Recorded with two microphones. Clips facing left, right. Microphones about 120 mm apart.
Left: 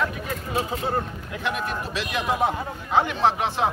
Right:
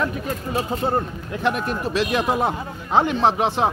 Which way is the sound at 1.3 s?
40° right (ahead or behind).